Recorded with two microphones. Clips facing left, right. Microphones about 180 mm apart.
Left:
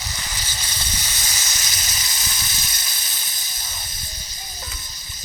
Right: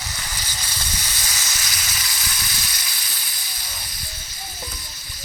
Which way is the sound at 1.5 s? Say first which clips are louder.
Right 1 dB; 20° left (ahead or behind).